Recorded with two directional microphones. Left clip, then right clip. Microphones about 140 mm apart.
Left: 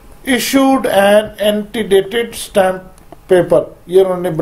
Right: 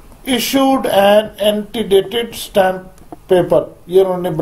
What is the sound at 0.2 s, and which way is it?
Speech, 10° left (ahead or behind).